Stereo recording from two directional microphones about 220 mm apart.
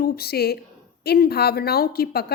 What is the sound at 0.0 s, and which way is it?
A woman's voice, 45° left (ahead or behind).